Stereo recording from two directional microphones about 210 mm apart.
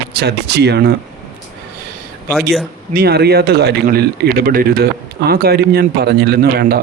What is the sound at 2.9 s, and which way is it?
A man's voice, 45° right (ahead or behind).